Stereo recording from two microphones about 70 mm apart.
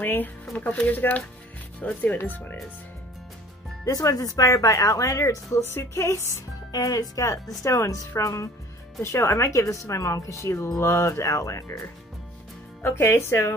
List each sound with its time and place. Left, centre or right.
0.0 s speech: left
3.8 s speech: left
6.7 s speech: left
12.8 s speech: left